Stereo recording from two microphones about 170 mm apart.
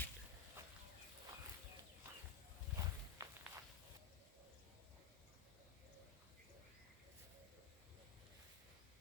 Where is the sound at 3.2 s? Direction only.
15° right (ahead or behind).